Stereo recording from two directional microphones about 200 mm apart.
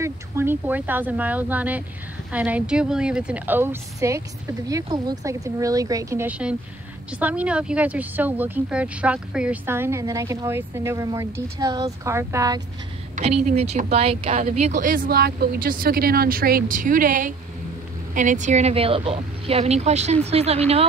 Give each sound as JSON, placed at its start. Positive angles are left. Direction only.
{"t": 0.0, "sound": "speech", "side_deg": -10}
{"t": 13.1, "sound": "speech", "side_deg": -35}